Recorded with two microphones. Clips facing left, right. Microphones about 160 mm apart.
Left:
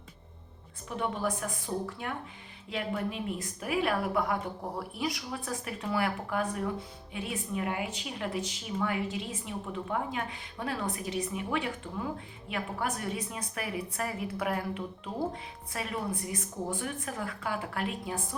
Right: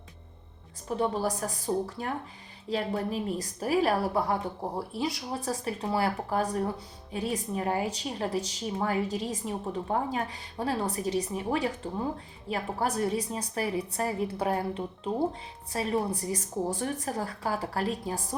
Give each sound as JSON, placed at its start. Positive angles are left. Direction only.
{"t": 0.9, "sound": "speech", "side_deg": -35}